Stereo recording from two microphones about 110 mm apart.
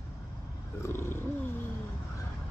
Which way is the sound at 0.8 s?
20° left (ahead or behind).